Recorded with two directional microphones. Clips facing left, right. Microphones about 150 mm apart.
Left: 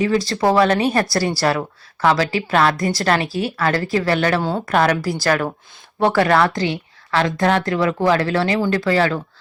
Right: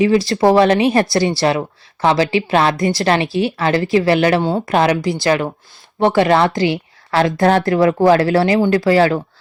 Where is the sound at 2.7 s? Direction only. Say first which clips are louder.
Right 3 dB; centre (ahead or behind).